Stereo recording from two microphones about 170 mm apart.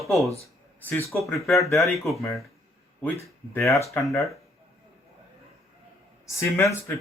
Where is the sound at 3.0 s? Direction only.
15° left (ahead or behind).